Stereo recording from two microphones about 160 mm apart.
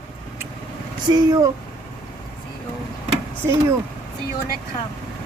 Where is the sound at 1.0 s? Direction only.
25° right (ahead or behind).